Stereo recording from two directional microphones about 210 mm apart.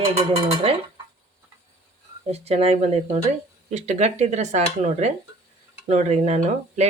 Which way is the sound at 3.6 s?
35° right (ahead or behind).